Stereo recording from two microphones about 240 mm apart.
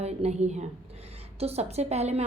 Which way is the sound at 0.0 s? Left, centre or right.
Right.